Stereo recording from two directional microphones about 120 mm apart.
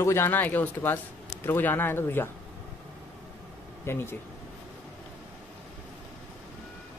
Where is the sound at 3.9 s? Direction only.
20° left (ahead or behind).